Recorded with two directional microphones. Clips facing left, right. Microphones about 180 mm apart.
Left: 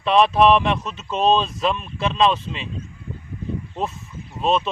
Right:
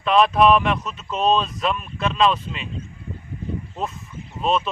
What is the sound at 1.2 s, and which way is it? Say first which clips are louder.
Speech: left 1 dB; 30° left (ahead or behind).